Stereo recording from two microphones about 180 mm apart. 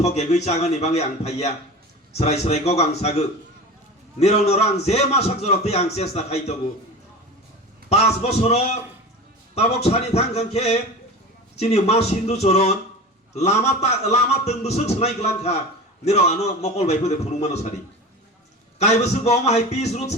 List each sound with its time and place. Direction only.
0.0 s a man's voice: 40° left (ahead or behind)
7.9 s a man's voice: 35° left (ahead or behind)
18.8 s a man's voice: 40° left (ahead or behind)